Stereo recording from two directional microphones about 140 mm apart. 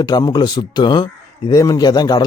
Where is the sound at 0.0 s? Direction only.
25° left (ahead or behind).